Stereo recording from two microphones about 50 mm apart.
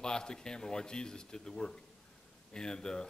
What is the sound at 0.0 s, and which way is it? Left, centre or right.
A man's voice, centre.